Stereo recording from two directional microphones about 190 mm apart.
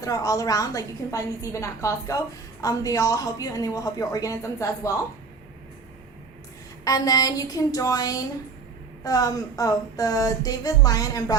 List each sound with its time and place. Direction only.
0.0 s a woman's voice: 20° left (ahead or behind)
6.8 s speech: 20° left (ahead or behind)